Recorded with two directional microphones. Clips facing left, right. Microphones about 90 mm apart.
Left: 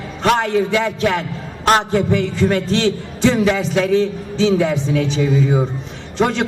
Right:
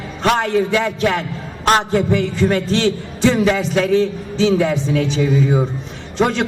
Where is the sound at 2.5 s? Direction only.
20° left (ahead or behind).